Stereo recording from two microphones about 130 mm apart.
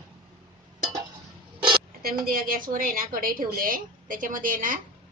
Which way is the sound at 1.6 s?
35° right (ahead or behind).